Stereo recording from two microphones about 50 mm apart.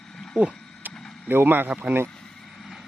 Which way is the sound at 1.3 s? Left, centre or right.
Right.